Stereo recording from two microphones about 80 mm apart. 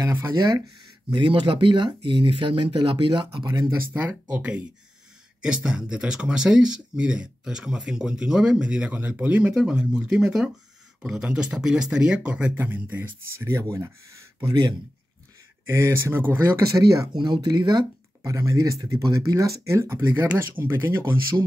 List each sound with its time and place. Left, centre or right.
0.3 s speech: right
1.1 s speech: right
3.4 s speech: right
3.7 s speech: right
4.4 s speech: centre
13.6 s speech: right
15.6 s speech: right
16.6 s speech: right
17.1 s speech: right
18.2 s speech: right